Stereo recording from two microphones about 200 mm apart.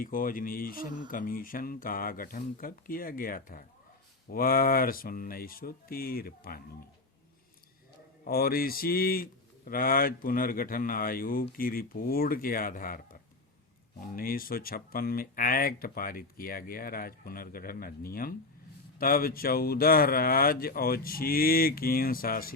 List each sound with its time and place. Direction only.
0.0 s speech: 45° left (ahead or behind)
8.2 s speech: 50° left (ahead or behind)
14.2 s speech: 45° left (ahead or behind)